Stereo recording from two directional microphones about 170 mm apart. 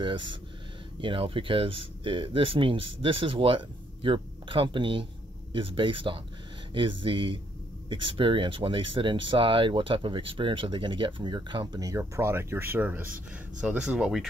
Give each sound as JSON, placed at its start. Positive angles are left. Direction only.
{"t": 0.0, "sound": "speech", "side_deg": -30}